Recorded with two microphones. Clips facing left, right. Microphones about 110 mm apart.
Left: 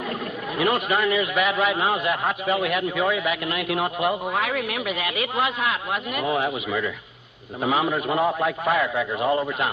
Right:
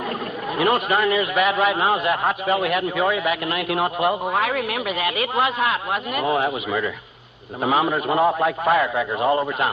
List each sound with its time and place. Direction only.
0.6 s a man's voice: 45° right (ahead or behind)